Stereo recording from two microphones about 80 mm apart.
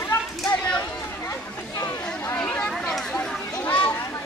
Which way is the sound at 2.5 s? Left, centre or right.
Centre.